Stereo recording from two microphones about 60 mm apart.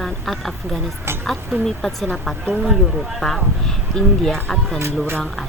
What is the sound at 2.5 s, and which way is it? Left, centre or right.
Speech, centre.